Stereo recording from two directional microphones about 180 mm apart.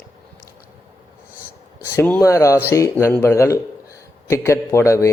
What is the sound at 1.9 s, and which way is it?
A man's voice, 10° left (ahead or behind).